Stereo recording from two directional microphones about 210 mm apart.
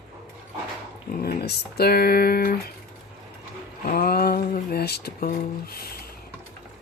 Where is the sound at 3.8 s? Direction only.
45° left (ahead or behind).